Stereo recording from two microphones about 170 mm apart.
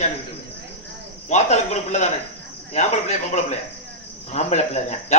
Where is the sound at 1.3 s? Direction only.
45° left (ahead or behind).